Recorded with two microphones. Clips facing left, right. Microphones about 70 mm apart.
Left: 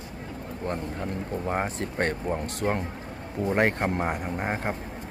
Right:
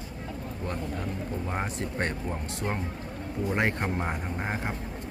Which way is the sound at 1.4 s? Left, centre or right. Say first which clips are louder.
Left 5 dB; left.